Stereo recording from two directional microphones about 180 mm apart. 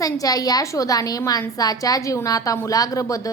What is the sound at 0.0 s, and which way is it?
A woman's voice, 20° left (ahead or behind).